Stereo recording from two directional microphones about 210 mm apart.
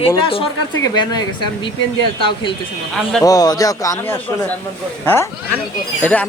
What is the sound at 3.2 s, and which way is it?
Speech, 15° left (ahead or behind).